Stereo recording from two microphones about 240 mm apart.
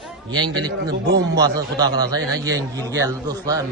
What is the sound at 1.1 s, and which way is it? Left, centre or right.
Speech, right.